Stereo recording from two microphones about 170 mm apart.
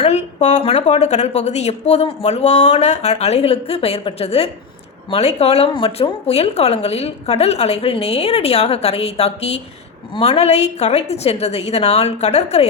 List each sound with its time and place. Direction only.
0.0 s speech: 40° left (ahead or behind)